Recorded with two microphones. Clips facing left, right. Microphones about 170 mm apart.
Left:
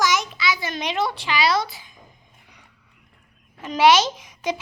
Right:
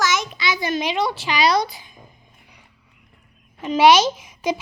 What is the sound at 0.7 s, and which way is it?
Speech, centre (ahead or behind).